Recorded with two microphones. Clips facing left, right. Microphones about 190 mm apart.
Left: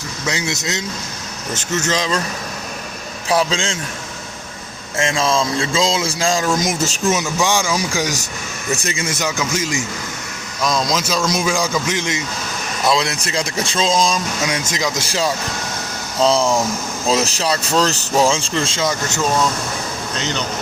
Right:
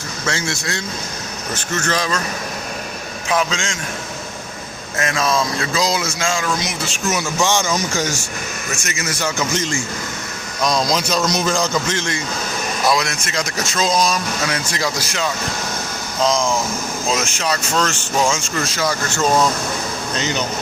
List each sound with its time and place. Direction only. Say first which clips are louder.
0.3 s speech: left 1 dB; 20° left (ahead or behind)
3.2 s speech: left 3 dB; 30° left (ahead or behind)
4.9 s speech: left 1 dB; 25° left (ahead or behind); by 7.0 s 45° left (ahead or behind)
7.4 s a man's voice: right 1 dB; 10° left (ahead or behind)
8.7 s speech: left 5 dB; 30° left (ahead or behind)
9.4 s a man's voice: even; 5° left (ahead or behind)
12.9 s speech: left 4 dB; 30° left (ahead or behind)